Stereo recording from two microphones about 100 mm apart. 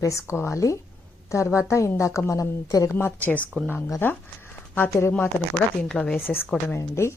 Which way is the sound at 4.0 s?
20° left (ahead or behind).